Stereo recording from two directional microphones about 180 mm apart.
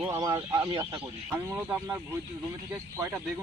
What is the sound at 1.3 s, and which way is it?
Speech, 10° right (ahead or behind).